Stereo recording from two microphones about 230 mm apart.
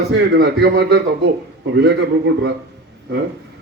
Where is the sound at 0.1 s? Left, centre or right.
Right.